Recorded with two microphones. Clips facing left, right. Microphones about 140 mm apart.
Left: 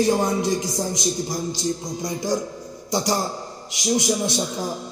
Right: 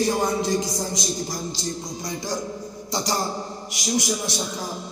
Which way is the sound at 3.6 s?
20° left (ahead or behind).